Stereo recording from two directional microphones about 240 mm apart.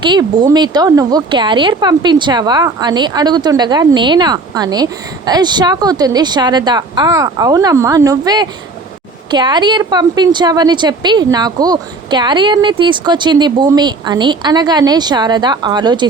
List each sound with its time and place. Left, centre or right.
0.0 s speech: centre